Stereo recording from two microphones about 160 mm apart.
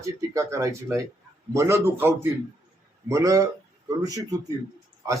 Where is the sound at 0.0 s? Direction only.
20° right (ahead or behind).